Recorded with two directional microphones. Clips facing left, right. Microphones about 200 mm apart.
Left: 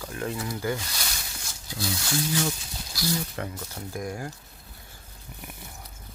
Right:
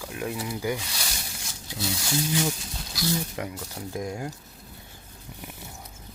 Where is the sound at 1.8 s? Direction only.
10° right (ahead or behind).